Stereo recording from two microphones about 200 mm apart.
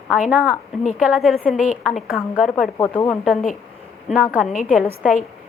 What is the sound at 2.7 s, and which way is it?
Speech, 20° left (ahead or behind).